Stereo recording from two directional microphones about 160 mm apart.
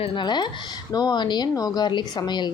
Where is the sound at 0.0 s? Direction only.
30° left (ahead or behind).